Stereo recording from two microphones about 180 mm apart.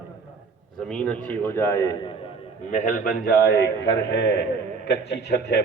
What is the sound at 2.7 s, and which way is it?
A man's voice, 50° left (ahead or behind).